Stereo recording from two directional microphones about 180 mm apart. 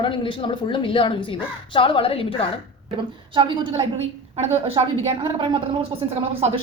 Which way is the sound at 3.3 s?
25° right (ahead or behind).